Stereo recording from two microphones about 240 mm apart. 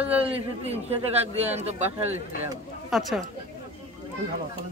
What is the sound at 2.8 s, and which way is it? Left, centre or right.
Speech, centre.